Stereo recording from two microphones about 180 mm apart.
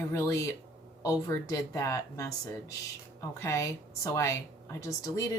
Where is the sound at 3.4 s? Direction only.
15° left (ahead or behind).